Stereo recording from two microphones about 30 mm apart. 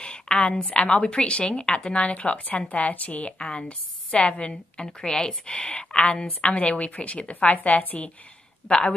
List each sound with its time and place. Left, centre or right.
0.3 s a woman's voice: left
0.6 s a woman's voice: left
1.0 s a woman's voice: left
4.8 s a woman's voice: left
6.4 s a woman's voice: left
8.6 s a woman's voice: left